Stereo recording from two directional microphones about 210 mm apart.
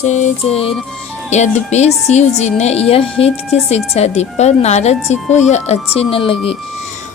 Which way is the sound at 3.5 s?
30° left (ahead or behind).